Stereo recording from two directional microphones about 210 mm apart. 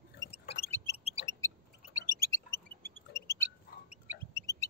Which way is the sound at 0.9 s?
30° left (ahead or behind).